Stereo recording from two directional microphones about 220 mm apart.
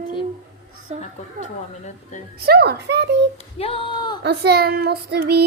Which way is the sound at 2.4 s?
45° right (ahead or behind).